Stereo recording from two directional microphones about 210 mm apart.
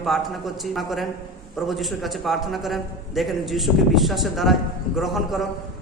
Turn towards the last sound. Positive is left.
turn(degrees=0)  # may be behind; listen again after turning